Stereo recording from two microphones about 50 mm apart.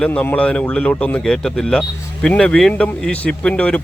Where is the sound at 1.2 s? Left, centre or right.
Centre.